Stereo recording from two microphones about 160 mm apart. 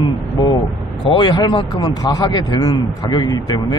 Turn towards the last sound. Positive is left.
turn(degrees=25)  # may be behind; listen again after turning